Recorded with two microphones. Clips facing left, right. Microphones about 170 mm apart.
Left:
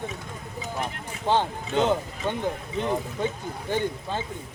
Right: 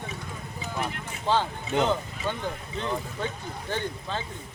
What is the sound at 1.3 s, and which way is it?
Speech, 15° left (ahead or behind).